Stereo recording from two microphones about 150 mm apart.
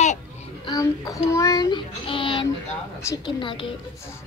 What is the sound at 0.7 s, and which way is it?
A child's voice, 25° left (ahead or behind).